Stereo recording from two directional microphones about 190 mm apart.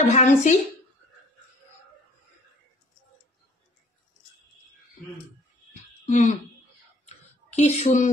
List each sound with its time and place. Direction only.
0.1 s speech: 40° left (ahead or behind)
6.0 s speech: 40° left (ahead or behind)
7.1 s a sound: 35° left (ahead or behind)